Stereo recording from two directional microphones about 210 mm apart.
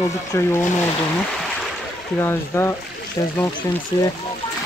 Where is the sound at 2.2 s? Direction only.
10° left (ahead or behind).